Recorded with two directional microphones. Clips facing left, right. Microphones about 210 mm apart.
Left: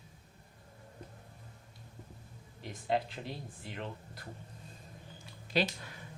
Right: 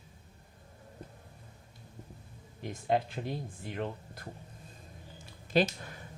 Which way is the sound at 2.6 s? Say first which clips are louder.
Right 3 dB; 50° right (ahead or behind).